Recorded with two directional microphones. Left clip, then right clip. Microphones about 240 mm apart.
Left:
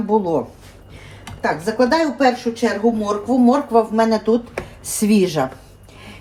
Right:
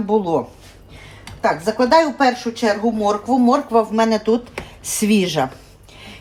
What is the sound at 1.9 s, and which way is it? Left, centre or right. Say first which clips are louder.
Speech: right 6 dB; centre.